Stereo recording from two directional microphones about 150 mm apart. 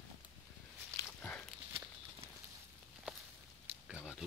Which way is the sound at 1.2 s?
10° left (ahead or behind).